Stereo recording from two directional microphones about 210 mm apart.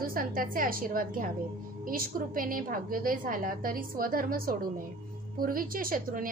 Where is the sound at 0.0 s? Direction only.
40° right (ahead or behind).